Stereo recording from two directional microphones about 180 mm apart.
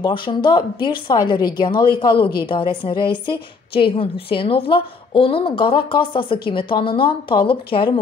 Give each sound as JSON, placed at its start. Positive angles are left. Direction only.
{"t": 0.0, "sound": "a woman's voice", "side_deg": 25}